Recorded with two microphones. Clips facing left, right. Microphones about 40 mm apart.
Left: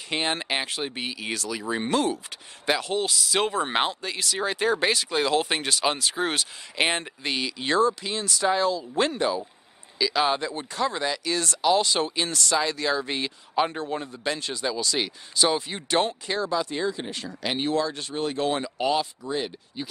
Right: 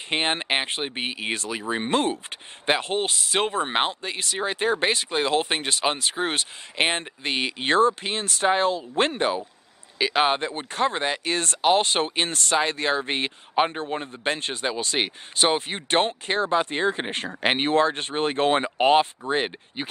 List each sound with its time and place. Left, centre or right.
0.1 s speech: right